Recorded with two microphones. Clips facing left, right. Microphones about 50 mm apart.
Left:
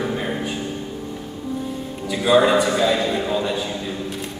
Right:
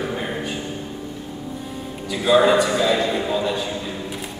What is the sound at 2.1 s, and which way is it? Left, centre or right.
A man's voice, centre.